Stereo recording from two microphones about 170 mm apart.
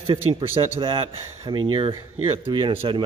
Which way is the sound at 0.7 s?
30° right (ahead or behind).